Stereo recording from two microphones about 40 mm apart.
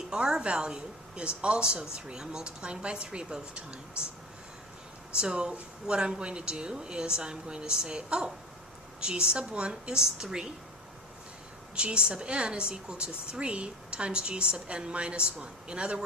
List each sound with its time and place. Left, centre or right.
0.1 s a woman's voice: centre
5.1 s a woman's voice: right
11.7 s a woman's voice: right